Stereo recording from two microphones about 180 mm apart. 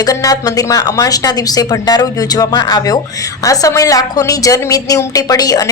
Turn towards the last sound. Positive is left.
turn(degrees=20)  # may be behind; listen again after turning